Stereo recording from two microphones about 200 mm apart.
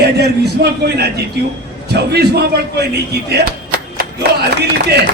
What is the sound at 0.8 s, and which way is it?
Speech, 55° right (ahead or behind).